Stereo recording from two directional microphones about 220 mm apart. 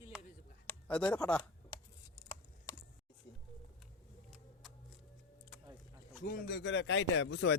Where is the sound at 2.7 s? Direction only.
15° left (ahead or behind).